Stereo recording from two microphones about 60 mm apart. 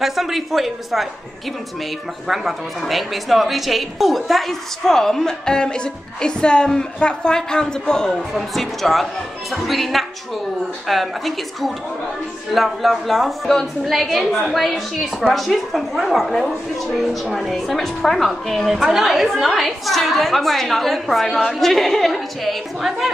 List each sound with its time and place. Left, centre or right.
0.0 s a woman's voice: centre
2.2 s a woman's voice: centre